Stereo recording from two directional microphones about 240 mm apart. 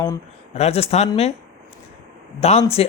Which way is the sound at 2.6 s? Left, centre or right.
Left.